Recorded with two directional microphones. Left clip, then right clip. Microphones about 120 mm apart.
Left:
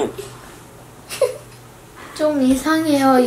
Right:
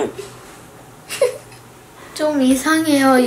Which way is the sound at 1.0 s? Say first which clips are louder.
Right 2 dB; centre (ahead or behind).